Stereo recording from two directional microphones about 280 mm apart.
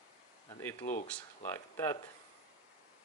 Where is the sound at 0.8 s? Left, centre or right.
Left.